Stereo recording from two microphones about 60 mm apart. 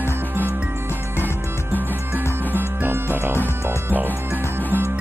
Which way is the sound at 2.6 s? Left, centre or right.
Right.